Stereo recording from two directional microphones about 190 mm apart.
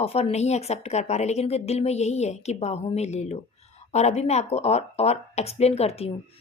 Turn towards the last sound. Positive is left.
turn(degrees=30)  # may be behind; listen again after turning